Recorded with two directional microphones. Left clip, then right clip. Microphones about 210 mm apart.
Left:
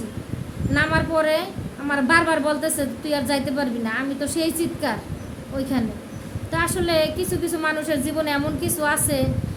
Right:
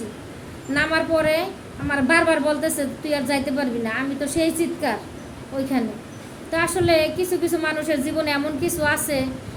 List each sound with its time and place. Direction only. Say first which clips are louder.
0.7 s a woman's voice: right 1 dB; 5° left (ahead or behind)